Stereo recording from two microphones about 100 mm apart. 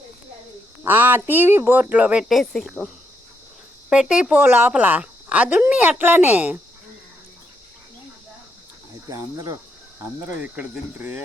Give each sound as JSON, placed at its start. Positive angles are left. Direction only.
{"t": 0.9, "sound": "speech", "side_deg": -20}
{"t": 2.3, "sound": "speech", "side_deg": 5}
{"t": 9.0, "sound": "cricket", "side_deg": -35}
{"t": 10.4, "sound": "speech", "side_deg": -15}